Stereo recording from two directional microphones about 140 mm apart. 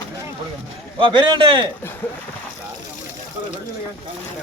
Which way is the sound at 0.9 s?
35° right (ahead or behind).